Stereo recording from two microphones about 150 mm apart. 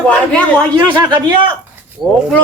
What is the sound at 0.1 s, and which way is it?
Speech, 10° left (ahead or behind).